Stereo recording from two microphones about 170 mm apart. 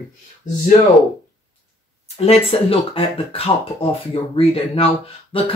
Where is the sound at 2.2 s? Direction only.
35° left (ahead or behind).